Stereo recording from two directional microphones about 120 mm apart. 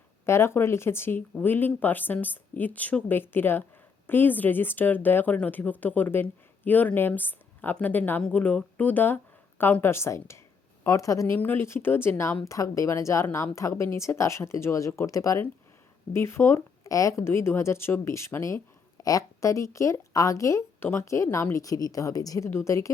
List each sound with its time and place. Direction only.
0.3 s speech: 20° left (ahead or behind)